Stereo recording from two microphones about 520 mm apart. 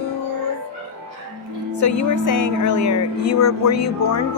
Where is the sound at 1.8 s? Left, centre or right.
Left.